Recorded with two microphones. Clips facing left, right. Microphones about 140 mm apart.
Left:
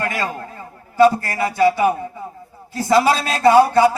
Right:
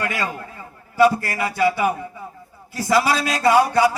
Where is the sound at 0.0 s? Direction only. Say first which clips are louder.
Left 2 dB; 35° left (ahead or behind).